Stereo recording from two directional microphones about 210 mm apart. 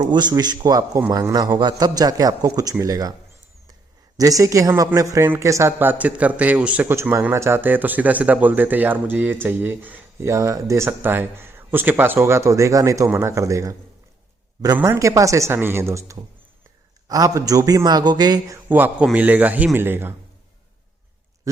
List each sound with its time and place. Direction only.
0.0 s speech: 20° right (ahead or behind)
4.2 s speech: 15° right (ahead or behind)
21.5 s pig: 15° right (ahead or behind)